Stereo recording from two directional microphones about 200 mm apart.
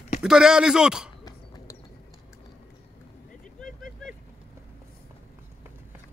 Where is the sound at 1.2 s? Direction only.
20° left (ahead or behind).